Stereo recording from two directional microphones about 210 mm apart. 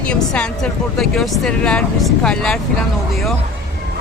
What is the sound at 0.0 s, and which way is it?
Speech, 5° left (ahead or behind).